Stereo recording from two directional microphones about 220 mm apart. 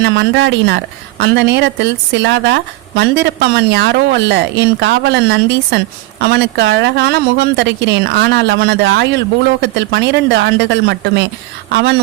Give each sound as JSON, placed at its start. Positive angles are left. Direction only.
{"t": 0.0, "sound": "speech", "side_deg": -50}